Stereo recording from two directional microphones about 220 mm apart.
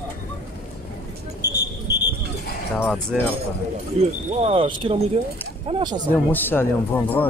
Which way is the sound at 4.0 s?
30° right (ahead or behind).